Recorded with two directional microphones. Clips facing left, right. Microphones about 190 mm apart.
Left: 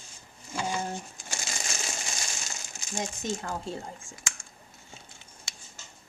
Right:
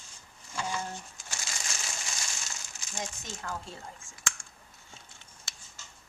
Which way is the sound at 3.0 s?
25° left (ahead or behind).